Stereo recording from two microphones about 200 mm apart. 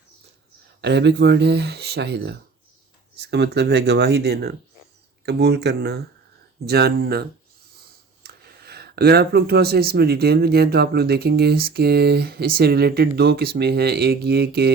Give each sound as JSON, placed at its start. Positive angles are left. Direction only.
{"t": 0.8, "sound": "speech", "side_deg": -55}